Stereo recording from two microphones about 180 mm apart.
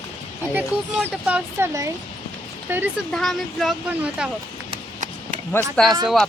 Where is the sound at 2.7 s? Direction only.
10° right (ahead or behind).